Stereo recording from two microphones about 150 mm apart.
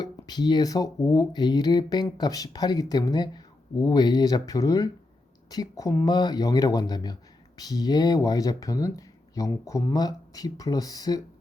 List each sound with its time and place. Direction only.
0.0 s speech: 30° left (ahead or behind)